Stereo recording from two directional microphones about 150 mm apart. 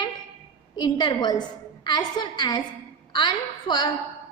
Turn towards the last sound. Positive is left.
turn(degrees=30)  # may be behind; listen again after turning